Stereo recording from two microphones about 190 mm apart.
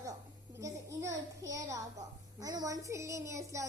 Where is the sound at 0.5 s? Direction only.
15° right (ahead or behind).